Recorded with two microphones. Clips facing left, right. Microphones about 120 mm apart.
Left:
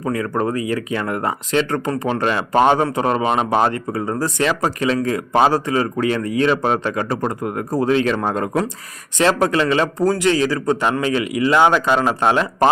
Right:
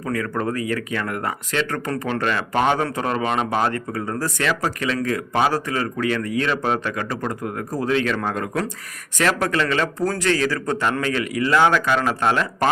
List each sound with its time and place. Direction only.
0.0 s a man's voice: 25° left (ahead or behind)